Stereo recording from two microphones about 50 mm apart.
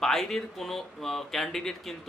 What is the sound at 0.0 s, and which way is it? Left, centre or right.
Speech, centre.